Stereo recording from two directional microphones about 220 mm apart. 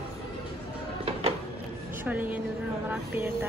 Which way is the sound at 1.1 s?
25° right (ahead or behind).